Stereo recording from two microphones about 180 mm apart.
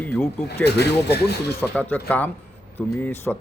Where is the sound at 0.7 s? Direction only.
65° left (ahead or behind).